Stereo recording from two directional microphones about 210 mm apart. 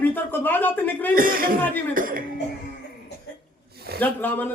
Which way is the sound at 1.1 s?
40° right (ahead or behind).